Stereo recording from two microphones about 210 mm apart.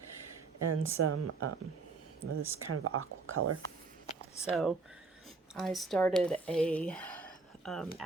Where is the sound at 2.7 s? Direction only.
90° right.